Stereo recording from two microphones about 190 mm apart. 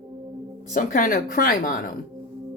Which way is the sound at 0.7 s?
45° left (ahead or behind).